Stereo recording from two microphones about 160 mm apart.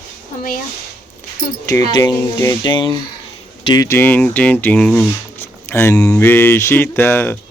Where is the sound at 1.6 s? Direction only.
25° left (ahead or behind).